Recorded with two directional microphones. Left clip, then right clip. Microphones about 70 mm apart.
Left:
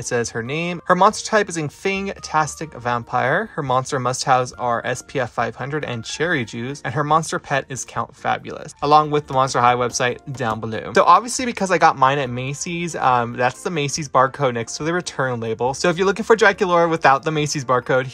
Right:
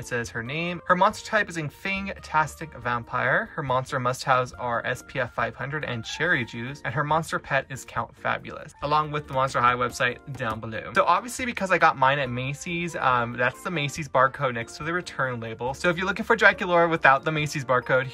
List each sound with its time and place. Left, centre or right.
0.4 s speech: left
8.8 s speech: left